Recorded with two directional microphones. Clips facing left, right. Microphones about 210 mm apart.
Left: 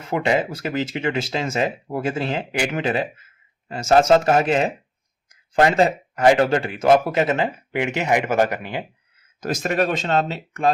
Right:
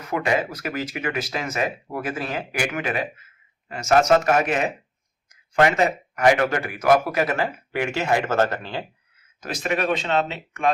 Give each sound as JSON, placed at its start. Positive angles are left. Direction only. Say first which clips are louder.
{"t": 0.0, "sound": "speech", "louder": "left 3 dB", "side_deg": 25}
{"t": 9.4, "sound": "speech", "louder": "left 4 dB", "side_deg": 40}